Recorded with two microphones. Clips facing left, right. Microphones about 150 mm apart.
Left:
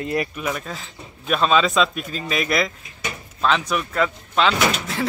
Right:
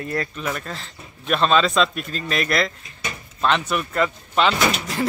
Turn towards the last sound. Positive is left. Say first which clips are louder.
# even
turn(degrees=0)  # may be behind; listen again after turning